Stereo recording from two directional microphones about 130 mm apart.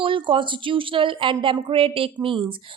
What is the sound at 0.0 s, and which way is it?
A woman's voice, 40° right (ahead or behind).